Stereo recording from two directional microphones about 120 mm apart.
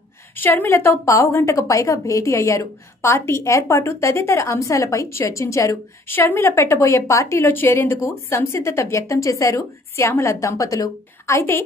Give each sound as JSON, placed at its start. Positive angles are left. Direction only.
{"t": 0.4, "sound": "a woman's voice", "side_deg": 15}